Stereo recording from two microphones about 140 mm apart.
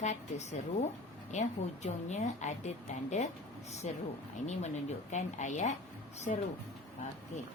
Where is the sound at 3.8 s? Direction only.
55° left (ahead or behind).